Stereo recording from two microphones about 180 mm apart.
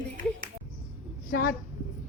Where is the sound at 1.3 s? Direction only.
60° left (ahead or behind).